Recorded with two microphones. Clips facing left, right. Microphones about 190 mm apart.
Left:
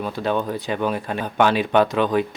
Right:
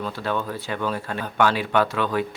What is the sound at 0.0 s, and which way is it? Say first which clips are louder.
Speech: left 4 dB; 20° left (ahead or behind).